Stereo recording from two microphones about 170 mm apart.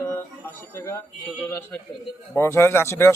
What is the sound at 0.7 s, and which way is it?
Speech, 15° left (ahead or behind).